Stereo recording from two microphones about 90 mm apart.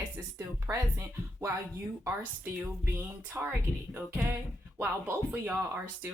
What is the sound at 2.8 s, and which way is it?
Speech, 20° right (ahead or behind).